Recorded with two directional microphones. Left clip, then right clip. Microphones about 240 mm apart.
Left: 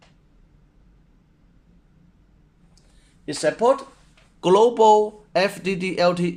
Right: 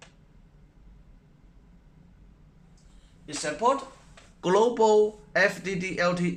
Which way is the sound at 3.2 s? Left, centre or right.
Left.